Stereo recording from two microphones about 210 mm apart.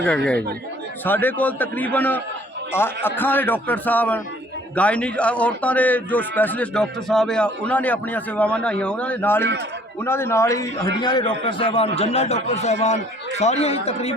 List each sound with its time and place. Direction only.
1.0 s a man's voice: 10° left (ahead or behind); by 14.1 s 30° left (ahead or behind)